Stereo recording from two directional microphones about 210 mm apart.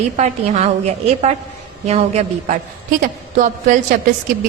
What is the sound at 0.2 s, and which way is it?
A man's voice, 30° right (ahead or behind).